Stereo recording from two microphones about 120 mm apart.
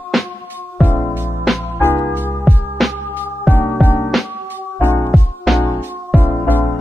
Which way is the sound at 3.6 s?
15° left (ahead or behind).